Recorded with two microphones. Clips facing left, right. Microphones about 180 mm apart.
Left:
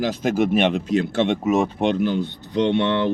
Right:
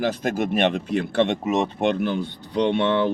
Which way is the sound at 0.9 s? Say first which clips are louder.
Left 1 dB; 55° right (ahead or behind).